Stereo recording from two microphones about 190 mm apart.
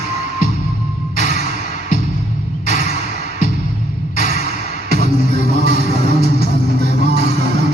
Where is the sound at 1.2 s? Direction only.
60° right (ahead or behind).